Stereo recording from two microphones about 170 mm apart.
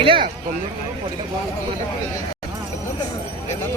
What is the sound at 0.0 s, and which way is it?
Speech, 30° right (ahead or behind).